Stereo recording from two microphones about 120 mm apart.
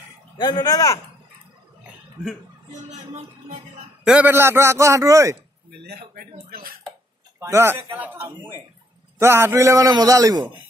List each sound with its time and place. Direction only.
0.4 s speech: 35° left (ahead or behind)
4.0 s a man's voice: 10° right (ahead or behind)
7.3 s a man's voice: 20° right (ahead or behind)